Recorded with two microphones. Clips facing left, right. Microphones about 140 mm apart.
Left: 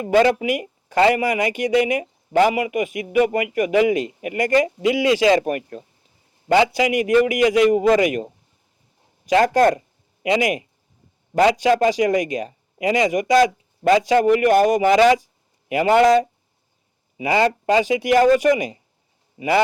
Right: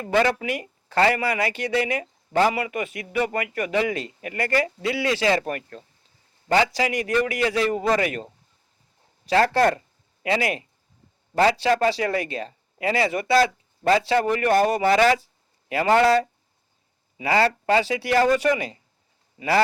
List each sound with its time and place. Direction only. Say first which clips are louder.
0.0 s speech: left 5 dB; 15° left (ahead or behind)
6.8 s speech: left 6 dB; 15° left (ahead or behind)
9.2 s speech: left 4 dB; 15° left (ahead or behind)
17.2 s speech: left 2 dB; 20° left (ahead or behind)